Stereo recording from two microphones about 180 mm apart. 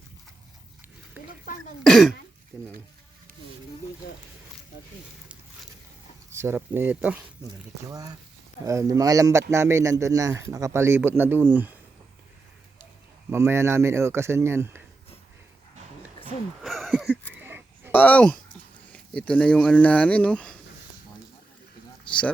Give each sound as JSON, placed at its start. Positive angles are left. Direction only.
{"t": 1.8, "sound": "speech", "side_deg": 0}
{"t": 2.5, "sound": "speech", "side_deg": -20}
{"t": 6.3, "sound": "a man's voice", "side_deg": -15}
{"t": 7.9, "sound": "a man's voice", "side_deg": -20}
{"t": 13.3, "sound": "a man's voice", "side_deg": -15}
{"t": 16.6, "sound": "a sound", "side_deg": 0}
{"t": 17.9, "sound": "speech", "side_deg": 10}
{"t": 22.1, "sound": "a sound", "side_deg": 5}